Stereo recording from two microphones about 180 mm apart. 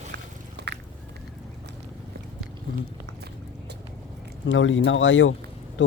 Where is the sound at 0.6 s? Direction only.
70° right (ahead or behind).